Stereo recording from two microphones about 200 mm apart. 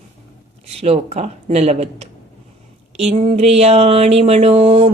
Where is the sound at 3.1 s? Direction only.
30° right (ahead or behind).